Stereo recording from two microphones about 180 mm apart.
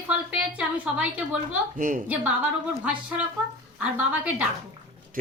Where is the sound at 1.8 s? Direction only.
45° right (ahead or behind).